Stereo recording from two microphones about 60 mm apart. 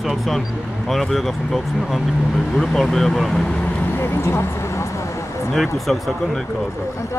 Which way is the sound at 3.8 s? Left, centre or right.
Left.